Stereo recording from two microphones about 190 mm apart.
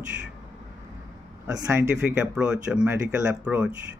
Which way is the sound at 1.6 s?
10° right (ahead or behind).